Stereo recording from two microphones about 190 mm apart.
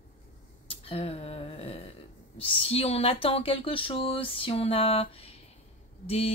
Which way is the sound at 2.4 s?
30° left (ahead or behind).